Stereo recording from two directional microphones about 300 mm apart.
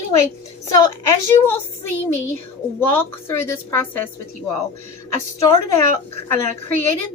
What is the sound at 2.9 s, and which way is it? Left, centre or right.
Speech, centre.